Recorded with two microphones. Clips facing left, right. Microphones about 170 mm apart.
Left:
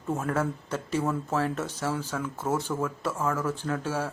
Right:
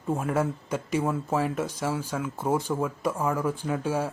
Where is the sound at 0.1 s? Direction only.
10° right (ahead or behind).